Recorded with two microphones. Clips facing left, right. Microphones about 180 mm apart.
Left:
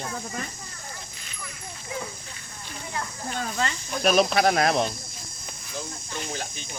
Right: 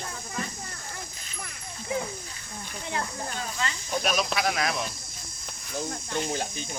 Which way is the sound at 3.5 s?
45° left (ahead or behind).